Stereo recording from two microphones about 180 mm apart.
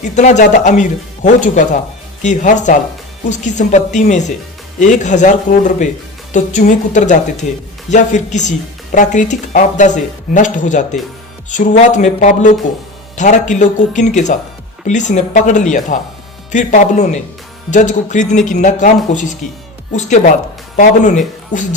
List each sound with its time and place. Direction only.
0.0 s a woman's voice: 40° left (ahead or behind)